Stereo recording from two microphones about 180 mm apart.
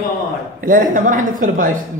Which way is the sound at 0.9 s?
45° right (ahead or behind).